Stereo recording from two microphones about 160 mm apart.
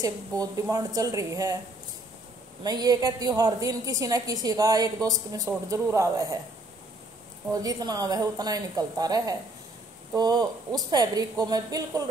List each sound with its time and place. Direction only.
0.0 s a woman's voice: 20° right (ahead or behind)
2.6 s a woman's voice: 25° right (ahead or behind)
7.5 s a woman's voice: 25° right (ahead or behind)